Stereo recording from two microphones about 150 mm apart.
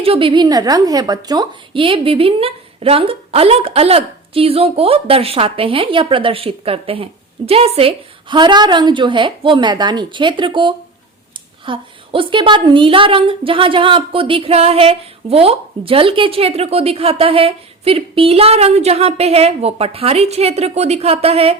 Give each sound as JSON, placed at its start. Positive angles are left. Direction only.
{"t": 0.0, "sound": "a woman's voice", "side_deg": -35}